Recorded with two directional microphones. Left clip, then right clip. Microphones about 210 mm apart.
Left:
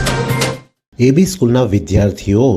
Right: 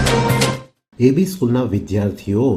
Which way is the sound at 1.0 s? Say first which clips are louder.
Left 3 dB; 35° left (ahead or behind).